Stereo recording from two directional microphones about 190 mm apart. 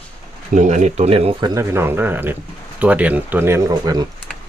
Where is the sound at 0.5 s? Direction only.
40° right (ahead or behind); by 4.0 s 20° right (ahead or behind).